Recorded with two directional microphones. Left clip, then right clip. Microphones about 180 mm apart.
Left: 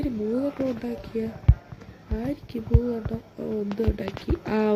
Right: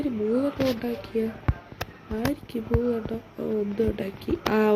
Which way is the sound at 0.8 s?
Centre (ahead or behind).